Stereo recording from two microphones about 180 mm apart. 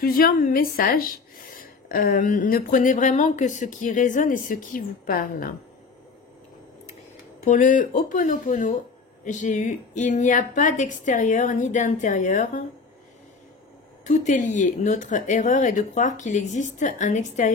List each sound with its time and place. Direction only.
0.0 s a woman's voice: 55° left (ahead or behind)
7.4 s a woman's voice: 45° left (ahead or behind)
14.0 s a woman's voice: 40° left (ahead or behind)